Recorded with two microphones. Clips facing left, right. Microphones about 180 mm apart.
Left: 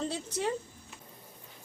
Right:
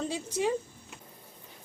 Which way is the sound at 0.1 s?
10° right (ahead or behind).